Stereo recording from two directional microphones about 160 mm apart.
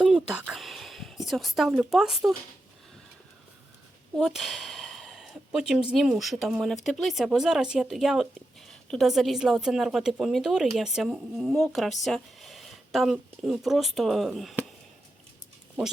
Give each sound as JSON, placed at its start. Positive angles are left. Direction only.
{"t": 0.0, "sound": "speech", "side_deg": -5}
{"t": 4.1, "sound": "speech", "side_deg": 0}